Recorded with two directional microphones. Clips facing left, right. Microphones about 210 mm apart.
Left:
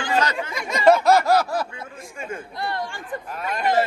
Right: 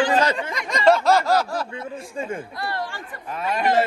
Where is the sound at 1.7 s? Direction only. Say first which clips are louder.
Right 7 dB; 30° right (ahead or behind).